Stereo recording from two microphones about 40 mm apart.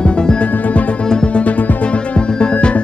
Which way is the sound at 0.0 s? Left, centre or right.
Left.